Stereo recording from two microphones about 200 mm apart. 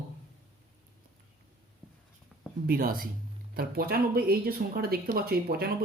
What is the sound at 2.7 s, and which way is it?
Speech, 45° right (ahead or behind).